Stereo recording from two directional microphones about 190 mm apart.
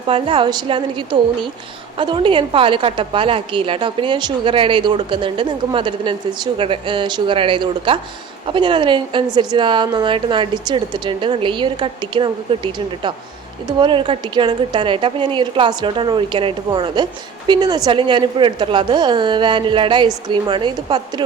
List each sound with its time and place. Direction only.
0.1 s a woman's voice: 25° right (ahead or behind)